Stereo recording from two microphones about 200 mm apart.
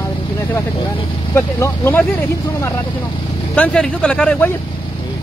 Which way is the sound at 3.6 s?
5° left (ahead or behind).